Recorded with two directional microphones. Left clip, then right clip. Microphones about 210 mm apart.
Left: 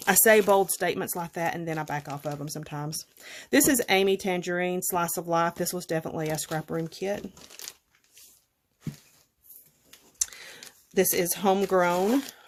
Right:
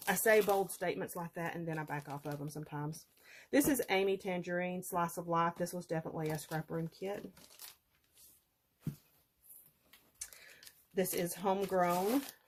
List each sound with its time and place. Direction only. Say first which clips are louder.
0.0 s speech: left 9 dB; 50° left (ahead or behind)
10.9 s speech: left 11 dB; 50° left (ahead or behind)